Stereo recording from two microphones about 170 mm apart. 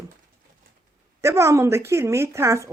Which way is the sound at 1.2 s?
15° right (ahead or behind).